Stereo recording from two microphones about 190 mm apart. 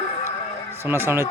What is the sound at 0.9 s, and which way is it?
Speech, 15° right (ahead or behind).